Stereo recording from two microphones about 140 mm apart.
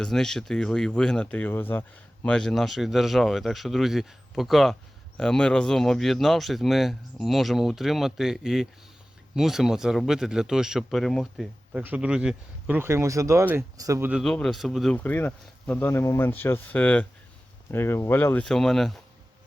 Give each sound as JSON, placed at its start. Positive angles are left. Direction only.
{"t": 0.0, "sound": "speech", "side_deg": 5}
{"t": 11.8, "sound": "speech", "side_deg": -10}
{"t": 14.1, "sound": "speech", "side_deg": 0}
{"t": 14.9, "sound": "speech", "side_deg": 10}
{"t": 18.4, "sound": "speech", "side_deg": 5}